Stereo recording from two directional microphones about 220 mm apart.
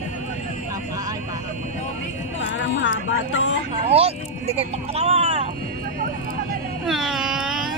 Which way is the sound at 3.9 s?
25° right (ahead or behind).